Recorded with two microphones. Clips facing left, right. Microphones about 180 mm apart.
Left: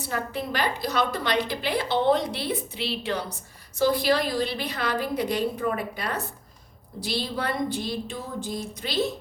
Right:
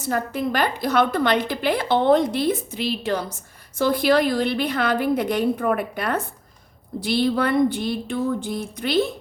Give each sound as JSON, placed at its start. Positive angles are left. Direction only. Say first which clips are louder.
{"t": 0.0, "sound": "a woman's voice", "louder": "right 6 dB", "side_deg": -50}
{"t": 3.8, "sound": "a woman's voice", "louder": "right 4 dB", "side_deg": -55}